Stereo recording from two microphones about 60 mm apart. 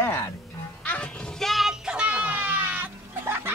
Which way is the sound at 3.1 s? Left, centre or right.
Right.